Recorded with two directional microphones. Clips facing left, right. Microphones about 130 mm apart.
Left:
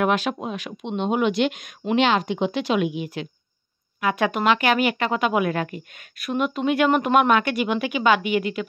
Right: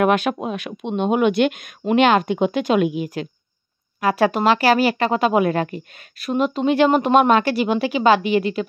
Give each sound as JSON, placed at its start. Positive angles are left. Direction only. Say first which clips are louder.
{"t": 0.0, "sound": "speech", "louder": "right 4 dB", "side_deg": -55}